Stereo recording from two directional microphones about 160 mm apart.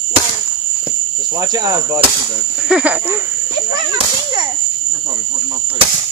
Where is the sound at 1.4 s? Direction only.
20° right (ahead or behind).